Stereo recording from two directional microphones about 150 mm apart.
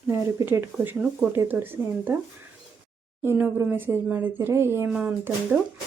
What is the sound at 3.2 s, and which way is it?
Speech, 15° right (ahead or behind).